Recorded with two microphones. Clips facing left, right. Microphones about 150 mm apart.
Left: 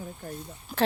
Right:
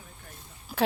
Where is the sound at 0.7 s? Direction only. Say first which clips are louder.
Left 1 dB; 5° right (ahead or behind).